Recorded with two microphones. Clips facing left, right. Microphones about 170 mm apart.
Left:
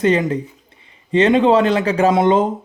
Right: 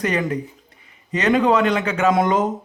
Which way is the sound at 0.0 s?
25° left (ahead or behind).